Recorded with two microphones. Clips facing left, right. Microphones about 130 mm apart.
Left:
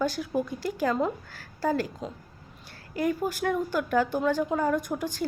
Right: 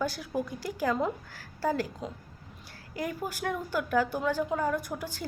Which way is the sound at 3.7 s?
10° right (ahead or behind).